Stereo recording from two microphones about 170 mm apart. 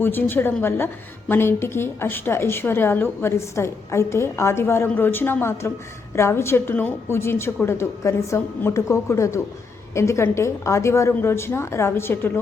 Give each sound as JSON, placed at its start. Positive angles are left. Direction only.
{"t": 0.0, "sound": "a woman's voice", "side_deg": 10}